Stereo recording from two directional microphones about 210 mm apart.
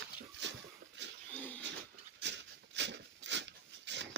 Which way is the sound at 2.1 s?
55° right (ahead or behind).